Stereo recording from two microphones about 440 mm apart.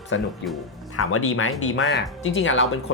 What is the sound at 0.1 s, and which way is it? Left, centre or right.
Speech, left.